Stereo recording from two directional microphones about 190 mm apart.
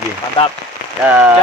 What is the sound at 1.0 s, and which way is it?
Speech, 5° right (ahead or behind).